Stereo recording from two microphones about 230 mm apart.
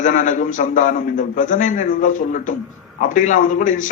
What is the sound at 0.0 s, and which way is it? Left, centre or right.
A man's voice, left.